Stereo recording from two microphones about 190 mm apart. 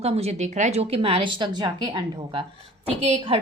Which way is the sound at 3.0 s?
35° right (ahead or behind).